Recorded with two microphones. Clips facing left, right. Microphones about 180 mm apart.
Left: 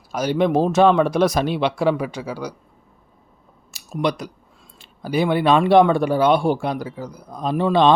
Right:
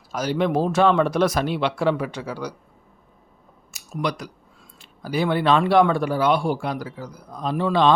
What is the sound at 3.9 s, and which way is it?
Speech, 25° left (ahead or behind).